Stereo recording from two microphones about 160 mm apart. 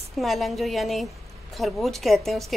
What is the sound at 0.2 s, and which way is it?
A woman's voice, centre (ahead or behind).